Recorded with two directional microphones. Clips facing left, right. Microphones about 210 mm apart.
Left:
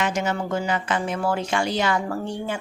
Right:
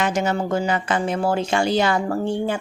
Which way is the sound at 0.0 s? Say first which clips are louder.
Right 3 dB; 35° right (ahead or behind).